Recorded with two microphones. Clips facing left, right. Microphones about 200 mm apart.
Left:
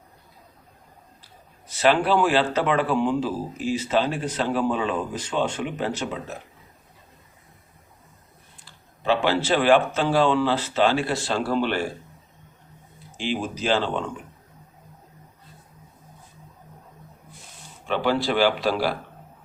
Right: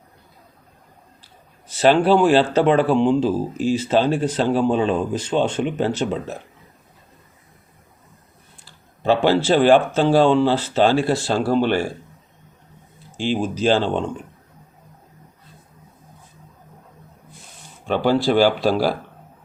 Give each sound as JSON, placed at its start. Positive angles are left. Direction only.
{"t": 1.6, "sound": "speech", "side_deg": -30}
{"t": 9.0, "sound": "speech", "side_deg": -35}
{"t": 13.1, "sound": "speech", "side_deg": -30}
{"t": 17.8, "sound": "speech", "side_deg": -40}